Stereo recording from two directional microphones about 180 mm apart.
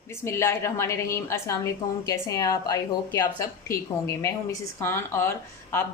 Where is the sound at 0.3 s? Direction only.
15° left (ahead or behind).